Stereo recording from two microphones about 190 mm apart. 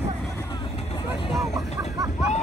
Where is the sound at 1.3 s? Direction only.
Centre (ahead or behind).